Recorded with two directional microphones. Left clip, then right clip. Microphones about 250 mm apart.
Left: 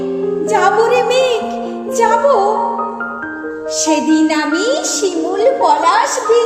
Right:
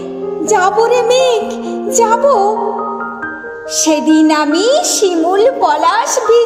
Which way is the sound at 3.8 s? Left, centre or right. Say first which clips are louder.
Right 3 dB; right.